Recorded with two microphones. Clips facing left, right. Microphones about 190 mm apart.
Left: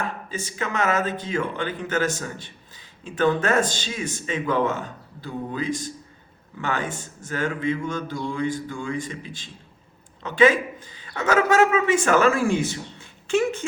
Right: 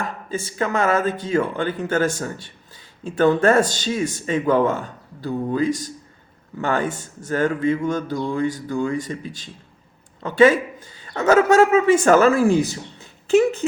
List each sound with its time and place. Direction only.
0.3 s a man's voice: 45° right (ahead or behind)